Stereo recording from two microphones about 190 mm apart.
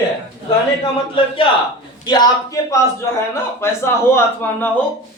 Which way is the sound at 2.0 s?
20° left (ahead or behind).